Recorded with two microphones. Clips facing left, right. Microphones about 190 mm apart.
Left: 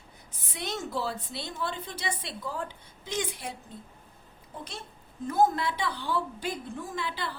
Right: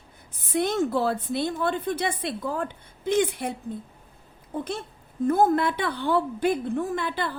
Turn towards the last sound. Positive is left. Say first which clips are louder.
# right 6 dB
turn(degrees=-50)  # may be behind; listen again after turning